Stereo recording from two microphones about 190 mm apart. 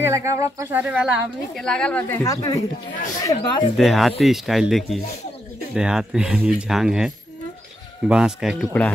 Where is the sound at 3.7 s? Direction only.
Centre (ahead or behind).